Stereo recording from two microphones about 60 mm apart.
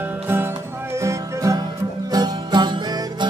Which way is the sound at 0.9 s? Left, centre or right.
Right.